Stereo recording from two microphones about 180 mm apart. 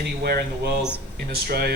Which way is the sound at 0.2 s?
60° right (ahead or behind).